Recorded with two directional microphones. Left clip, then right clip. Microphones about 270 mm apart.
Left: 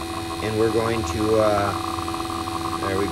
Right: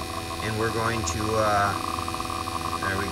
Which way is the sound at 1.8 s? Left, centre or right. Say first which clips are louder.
Left 2 dB; left.